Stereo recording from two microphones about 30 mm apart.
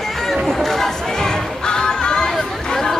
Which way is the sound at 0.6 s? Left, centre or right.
Centre.